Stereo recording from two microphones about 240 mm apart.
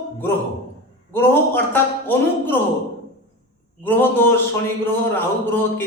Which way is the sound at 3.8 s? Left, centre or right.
Centre.